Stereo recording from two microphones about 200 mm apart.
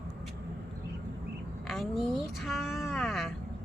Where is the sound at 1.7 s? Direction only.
Centre (ahead or behind).